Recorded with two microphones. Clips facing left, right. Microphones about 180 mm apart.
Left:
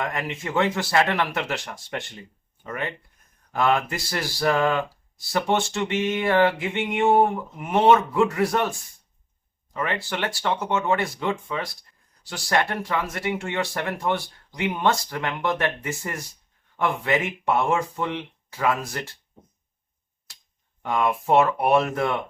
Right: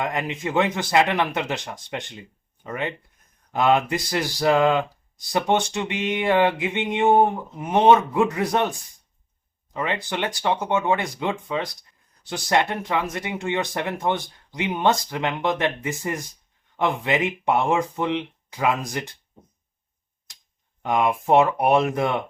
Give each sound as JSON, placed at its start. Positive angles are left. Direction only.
{"t": 0.0, "sound": "speech", "side_deg": -20}
{"t": 20.8, "sound": "speech", "side_deg": -15}